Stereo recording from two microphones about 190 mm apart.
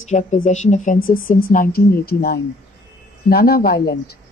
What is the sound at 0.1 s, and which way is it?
A woman's voice, 40° left (ahead or behind).